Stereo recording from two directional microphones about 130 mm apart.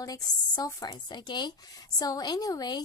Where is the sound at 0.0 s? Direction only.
30° left (ahead or behind).